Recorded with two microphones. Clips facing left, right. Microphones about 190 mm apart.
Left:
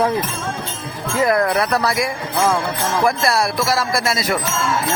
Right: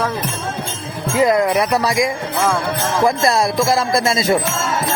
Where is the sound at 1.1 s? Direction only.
15° right (ahead or behind).